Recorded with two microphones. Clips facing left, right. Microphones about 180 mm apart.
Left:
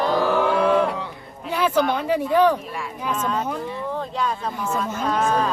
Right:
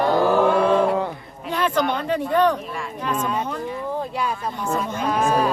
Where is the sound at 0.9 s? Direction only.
50° right (ahead or behind).